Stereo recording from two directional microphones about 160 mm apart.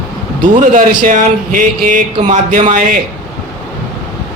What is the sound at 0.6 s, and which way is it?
A man's voice, 55° right (ahead or behind).